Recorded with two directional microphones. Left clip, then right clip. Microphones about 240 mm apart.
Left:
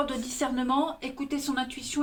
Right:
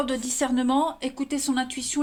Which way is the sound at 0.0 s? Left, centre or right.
Right.